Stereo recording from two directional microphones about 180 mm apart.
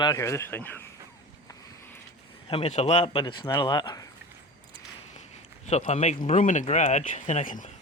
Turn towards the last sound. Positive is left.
turn(degrees=45)  # may be behind; listen again after turning